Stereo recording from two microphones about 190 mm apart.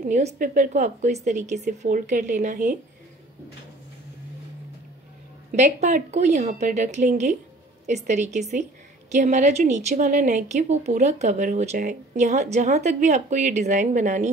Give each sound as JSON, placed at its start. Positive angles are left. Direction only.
{"t": 0.1, "sound": "a woman's voice", "side_deg": -40}
{"t": 5.5, "sound": "a woman's voice", "side_deg": -40}